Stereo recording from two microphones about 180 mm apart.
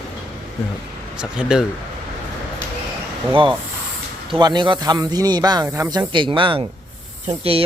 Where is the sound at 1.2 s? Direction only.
5° right (ahead or behind).